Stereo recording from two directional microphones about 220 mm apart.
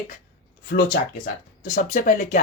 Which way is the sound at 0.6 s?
40° left (ahead or behind).